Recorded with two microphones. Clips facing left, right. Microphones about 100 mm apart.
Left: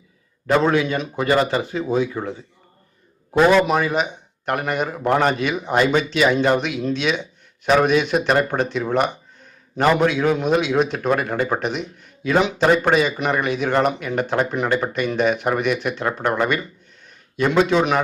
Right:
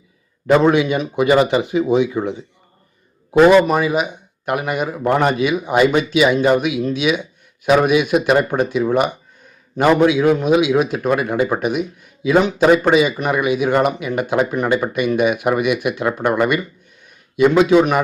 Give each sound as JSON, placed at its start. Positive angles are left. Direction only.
{"t": 0.4, "sound": "a man's voice", "side_deg": -15}
{"t": 3.3, "sound": "a man's voice", "side_deg": -5}